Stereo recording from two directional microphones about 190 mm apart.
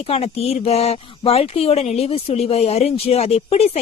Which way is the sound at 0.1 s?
30° left (ahead or behind).